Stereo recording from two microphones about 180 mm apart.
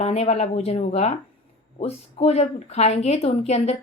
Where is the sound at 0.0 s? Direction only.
35° left (ahead or behind).